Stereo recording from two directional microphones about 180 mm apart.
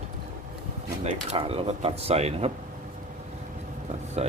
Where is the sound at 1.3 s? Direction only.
35° right (ahead or behind).